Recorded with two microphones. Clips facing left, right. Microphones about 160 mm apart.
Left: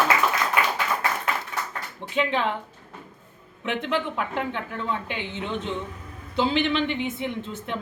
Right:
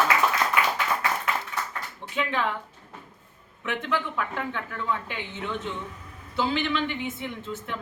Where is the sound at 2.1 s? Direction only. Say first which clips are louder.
Left 3 dB; 25° left (ahead or behind).